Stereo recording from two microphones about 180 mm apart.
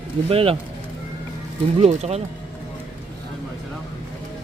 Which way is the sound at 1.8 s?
35° right (ahead or behind).